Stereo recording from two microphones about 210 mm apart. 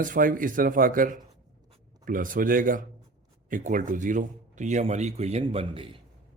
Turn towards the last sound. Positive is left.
turn(degrees=-25)  # may be behind; listen again after turning